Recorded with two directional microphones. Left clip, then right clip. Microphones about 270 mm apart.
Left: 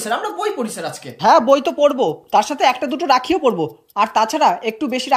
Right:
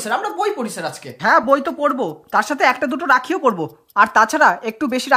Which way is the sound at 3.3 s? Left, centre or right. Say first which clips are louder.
Left 1 dB; right.